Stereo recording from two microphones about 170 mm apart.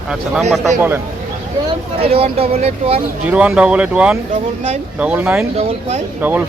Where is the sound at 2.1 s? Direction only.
35° right (ahead or behind).